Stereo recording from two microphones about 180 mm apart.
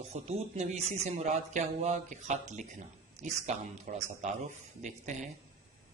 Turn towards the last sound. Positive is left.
turn(degrees=-40)  # may be behind; listen again after turning